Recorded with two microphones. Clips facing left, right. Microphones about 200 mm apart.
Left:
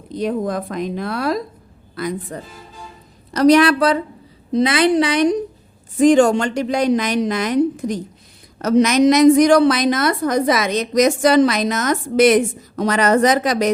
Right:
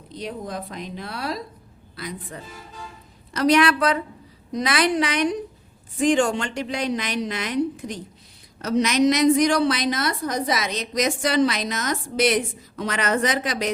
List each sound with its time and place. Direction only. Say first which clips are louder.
0.1 s a woman's voice: left 10 dB; 50° left (ahead or behind)
3.3 s a woman's voice: left 6 dB; 40° left (ahead or behind)